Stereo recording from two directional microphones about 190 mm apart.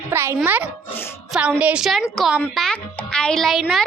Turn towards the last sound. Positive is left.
turn(degrees=0)  # may be behind; listen again after turning